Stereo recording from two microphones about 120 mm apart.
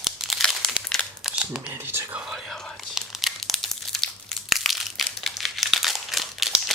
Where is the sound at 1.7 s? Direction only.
20° right (ahead or behind).